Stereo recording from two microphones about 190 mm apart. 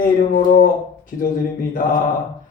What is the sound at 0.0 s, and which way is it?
Speech, 45° left (ahead or behind).